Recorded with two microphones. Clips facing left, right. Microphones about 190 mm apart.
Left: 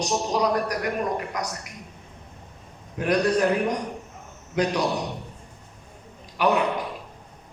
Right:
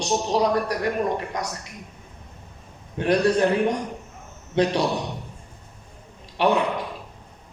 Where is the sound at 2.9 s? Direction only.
30° right (ahead or behind).